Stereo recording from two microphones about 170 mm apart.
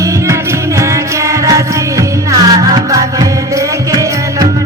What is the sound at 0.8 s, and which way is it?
Music, 20° right (ahead or behind).